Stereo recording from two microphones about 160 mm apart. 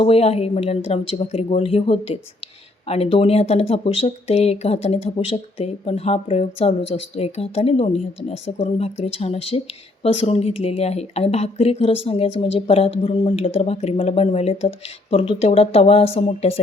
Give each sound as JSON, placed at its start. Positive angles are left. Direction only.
{"t": 0.0, "sound": "a woman's voice", "side_deg": 40}